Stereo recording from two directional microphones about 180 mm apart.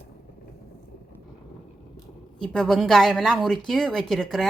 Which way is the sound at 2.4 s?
5° left (ahead or behind).